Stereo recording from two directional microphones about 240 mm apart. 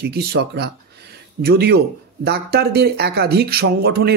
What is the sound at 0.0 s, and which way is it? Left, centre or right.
A man's voice, right.